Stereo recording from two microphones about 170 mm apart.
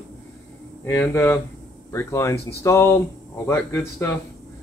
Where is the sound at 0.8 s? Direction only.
10° left (ahead or behind).